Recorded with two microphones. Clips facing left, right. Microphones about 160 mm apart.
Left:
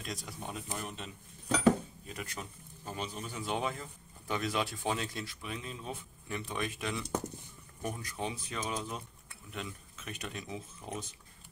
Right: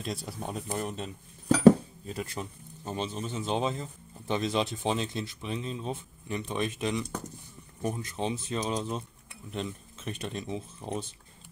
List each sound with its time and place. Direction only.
0.0 s speech: 30° right (ahead or behind)